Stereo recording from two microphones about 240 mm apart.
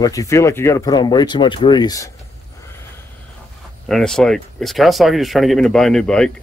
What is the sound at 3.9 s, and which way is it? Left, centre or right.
Speech, centre.